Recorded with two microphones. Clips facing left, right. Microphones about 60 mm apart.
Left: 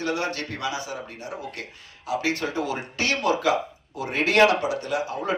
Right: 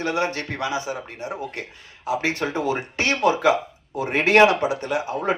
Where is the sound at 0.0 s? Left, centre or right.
Right.